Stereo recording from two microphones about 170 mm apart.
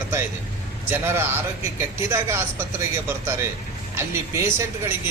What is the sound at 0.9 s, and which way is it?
Speech, 15° right (ahead or behind).